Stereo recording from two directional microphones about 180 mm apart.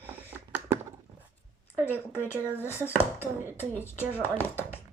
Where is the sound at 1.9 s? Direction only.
15° left (ahead or behind).